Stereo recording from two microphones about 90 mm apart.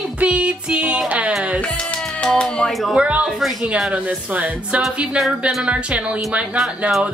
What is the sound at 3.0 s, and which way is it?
Speech, 10° right (ahead or behind).